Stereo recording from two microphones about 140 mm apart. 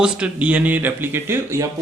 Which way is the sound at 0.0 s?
10° right (ahead or behind).